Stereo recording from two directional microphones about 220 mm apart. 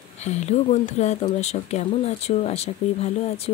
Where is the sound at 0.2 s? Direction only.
30° left (ahead or behind).